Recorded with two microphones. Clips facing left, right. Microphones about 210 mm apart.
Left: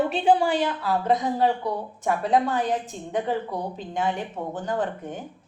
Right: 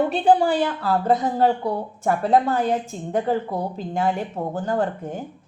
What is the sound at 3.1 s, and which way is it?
Speech, 35° right (ahead or behind).